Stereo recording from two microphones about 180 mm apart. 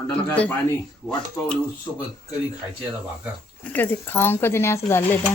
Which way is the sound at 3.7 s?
10° left (ahead or behind).